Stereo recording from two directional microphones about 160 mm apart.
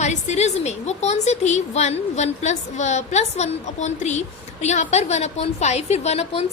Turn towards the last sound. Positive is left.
turn(degrees=40)  # may be behind; listen again after turning